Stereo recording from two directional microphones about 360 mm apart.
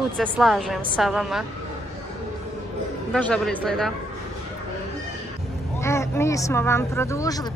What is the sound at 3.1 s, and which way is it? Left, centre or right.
Speech, centre.